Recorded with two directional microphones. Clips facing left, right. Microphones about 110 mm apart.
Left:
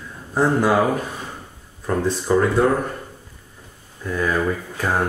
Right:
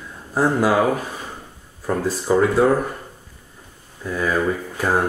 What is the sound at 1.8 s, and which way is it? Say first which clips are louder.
Speech: even; 5° right (ahead or behind).